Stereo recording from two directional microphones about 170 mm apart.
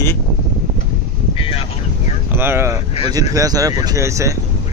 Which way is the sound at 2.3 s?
15° right (ahead or behind).